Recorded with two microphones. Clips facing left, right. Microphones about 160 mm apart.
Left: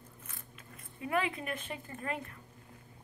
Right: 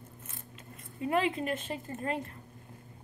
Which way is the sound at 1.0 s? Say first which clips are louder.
Right 4 dB; 25° right (ahead or behind).